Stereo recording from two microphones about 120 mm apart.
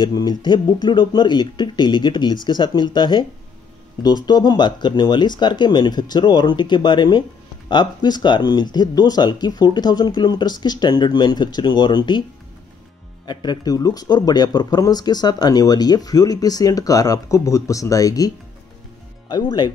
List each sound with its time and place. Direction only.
0.0 s speech: 35° left (ahead or behind)
13.3 s speech: 40° left (ahead or behind)